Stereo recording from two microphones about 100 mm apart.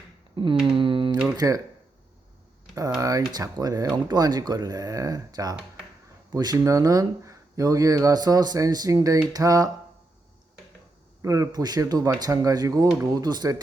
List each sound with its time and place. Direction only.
0.3 s mantra: 55° right (ahead or behind)
1.4 s speech: 35° right (ahead or behind)
3.0 s speech: 35° right (ahead or behind)
11.2 s speech: 35° right (ahead or behind)